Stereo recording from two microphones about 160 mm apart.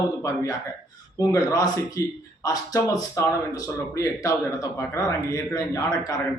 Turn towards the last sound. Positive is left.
turn(degrees=20)  # may be behind; listen again after turning